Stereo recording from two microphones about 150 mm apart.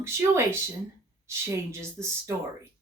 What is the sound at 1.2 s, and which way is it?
Speech, 20° right (ahead or behind).